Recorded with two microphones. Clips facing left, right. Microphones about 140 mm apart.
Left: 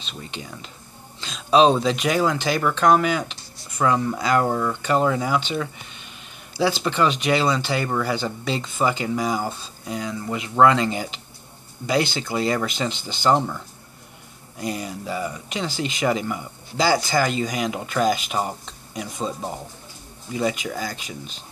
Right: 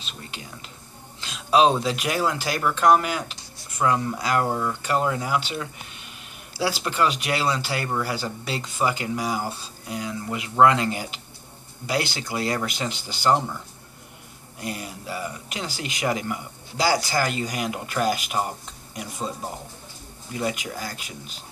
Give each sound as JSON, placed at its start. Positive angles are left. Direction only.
{"t": 0.0, "sound": "speech", "side_deg": -5}
{"t": 14.7, "sound": "speech", "side_deg": -5}
{"t": 20.3, "sound": "speech", "side_deg": -5}